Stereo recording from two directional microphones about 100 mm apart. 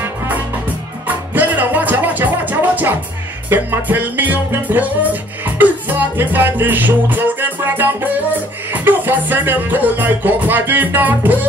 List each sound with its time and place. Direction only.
1.0 s music: 15° right (ahead or behind)